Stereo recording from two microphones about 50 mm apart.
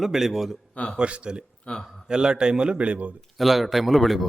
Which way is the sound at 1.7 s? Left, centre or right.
Left.